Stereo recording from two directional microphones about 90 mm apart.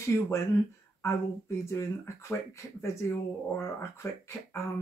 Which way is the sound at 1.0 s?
30° left (ahead or behind).